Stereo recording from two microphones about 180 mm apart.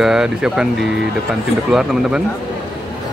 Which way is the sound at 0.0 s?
5° right (ahead or behind).